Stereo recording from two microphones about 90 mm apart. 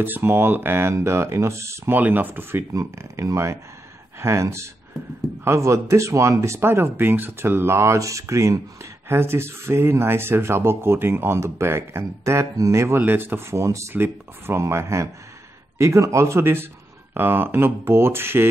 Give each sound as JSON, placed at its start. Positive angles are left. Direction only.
{"t": 0.0, "sound": "speech", "side_deg": -20}
{"t": 2.0, "sound": "speech", "side_deg": -20}
{"t": 2.7, "sound": "speech", "side_deg": -35}